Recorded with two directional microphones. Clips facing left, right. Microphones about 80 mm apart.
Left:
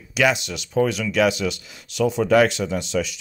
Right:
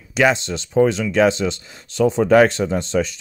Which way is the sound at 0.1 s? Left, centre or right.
Right.